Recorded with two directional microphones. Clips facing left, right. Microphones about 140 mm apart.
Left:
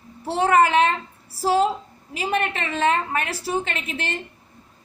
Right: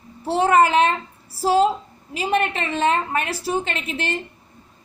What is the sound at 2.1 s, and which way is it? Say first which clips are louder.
A woman's voice: right 3 dB; 25° right (ahead or behind).